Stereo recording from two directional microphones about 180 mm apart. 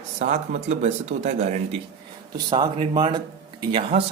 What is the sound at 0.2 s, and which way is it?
Speech, 40° right (ahead or behind).